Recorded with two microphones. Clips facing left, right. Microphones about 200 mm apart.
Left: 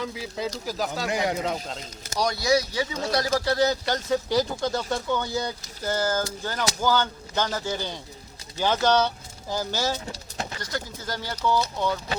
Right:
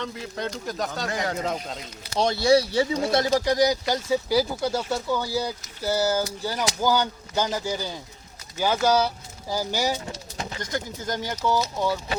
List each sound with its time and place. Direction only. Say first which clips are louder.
0.0 s speech: left 1 dB; 5° left (ahead or behind)
1.1 s speech: left 5 dB; 15° left (ahead or behind)
1.4 s speech: even; centre (ahead or behind)
2.1 s speech: right 4 dB; 25° right (ahead or behind); by 11.9 s 10° right (ahead or behind)